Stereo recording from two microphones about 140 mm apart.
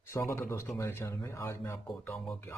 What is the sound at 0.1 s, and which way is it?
Speech, 20° left (ahead or behind).